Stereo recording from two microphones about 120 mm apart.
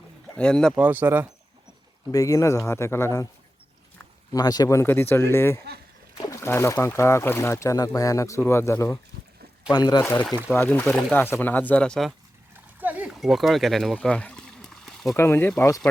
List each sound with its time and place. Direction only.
0.3 s speech: 5° left (ahead or behind)
0.8 s speech: 15° right (ahead or behind)
2.1 s speech: 25° left (ahead or behind)
4.3 s speech: 30° left (ahead or behind)
9.7 s speech: 35° left (ahead or behind)
10.0 s speech: 20° left (ahead or behind); by 12.1 s 5° left (ahead or behind)
12.5 s splash: 15° right (ahead or behind)
13.1 s a sound: centre (ahead or behind)
15.1 s speech: 20° left (ahead or behind)